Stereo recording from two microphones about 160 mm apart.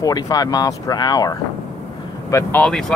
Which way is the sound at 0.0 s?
25° left (ahead or behind).